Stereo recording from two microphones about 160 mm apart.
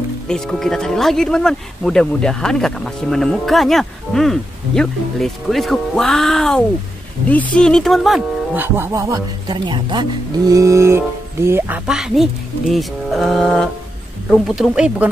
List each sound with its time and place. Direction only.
0.3 s speech: 5° left (ahead or behind)
8.5 s speech: 15° right (ahead or behind)